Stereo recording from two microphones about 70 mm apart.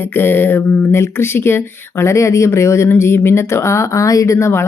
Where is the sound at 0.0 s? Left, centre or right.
Left.